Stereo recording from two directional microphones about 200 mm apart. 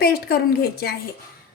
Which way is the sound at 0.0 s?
50° left (ahead or behind).